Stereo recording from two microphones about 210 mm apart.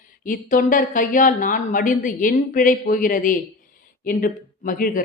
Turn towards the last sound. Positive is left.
turn(degrees=40)  # may be behind; listen again after turning